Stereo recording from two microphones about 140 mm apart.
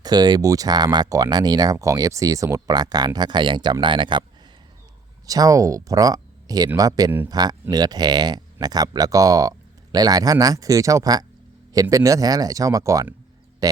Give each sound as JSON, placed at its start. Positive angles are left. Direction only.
{"t": 0.0, "sound": "speech", "side_deg": -30}
{"t": 5.2, "sound": "speech", "side_deg": -25}